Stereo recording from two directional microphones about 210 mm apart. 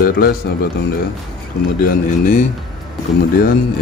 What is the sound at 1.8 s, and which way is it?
Speech, 40° left (ahead or behind).